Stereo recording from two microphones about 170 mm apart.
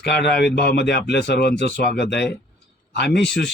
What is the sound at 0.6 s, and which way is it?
Speech, 75° left (ahead or behind).